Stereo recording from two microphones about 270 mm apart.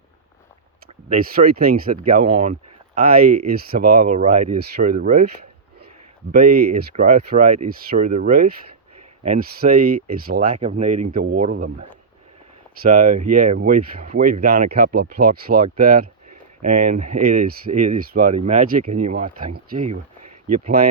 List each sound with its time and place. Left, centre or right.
1.1 s speech: right
6.3 s speech: right
12.8 s speech: right